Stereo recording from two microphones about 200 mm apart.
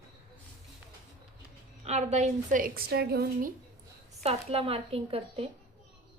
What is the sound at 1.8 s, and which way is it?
A woman's voice, 35° right (ahead or behind).